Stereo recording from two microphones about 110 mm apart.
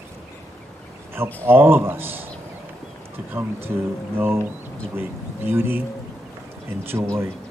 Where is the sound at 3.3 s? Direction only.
20° right (ahead or behind).